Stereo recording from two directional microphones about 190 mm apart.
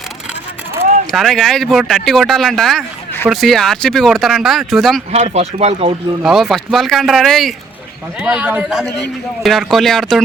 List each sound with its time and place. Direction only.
1.1 s speech: centre (ahead or behind)
5.1 s speech: 35° right (ahead or behind)
6.2 s speech: centre (ahead or behind)